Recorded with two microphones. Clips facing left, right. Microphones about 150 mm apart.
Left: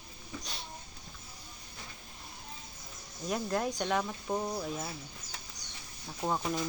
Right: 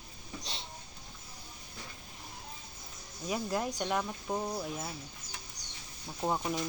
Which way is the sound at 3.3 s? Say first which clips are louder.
Left 1 dB; 5° right (ahead or behind).